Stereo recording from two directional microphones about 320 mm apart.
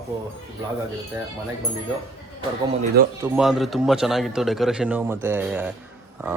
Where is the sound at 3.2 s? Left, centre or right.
Centre.